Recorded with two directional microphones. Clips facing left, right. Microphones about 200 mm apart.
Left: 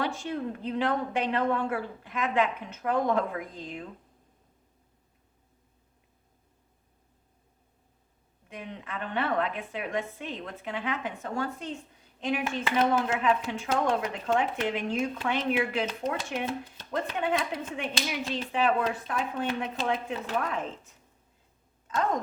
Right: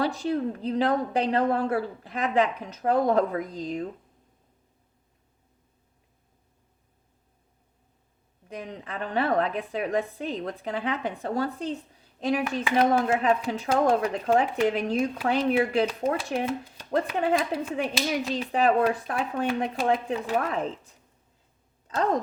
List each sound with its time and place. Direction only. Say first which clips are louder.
0.0 s a woman's voice: right 5 dB; 35° right (ahead or behind)
8.4 s a woman's voice: right 3 dB; 35° right (ahead or behind)
21.8 s speech: right 3 dB; 35° right (ahead or behind)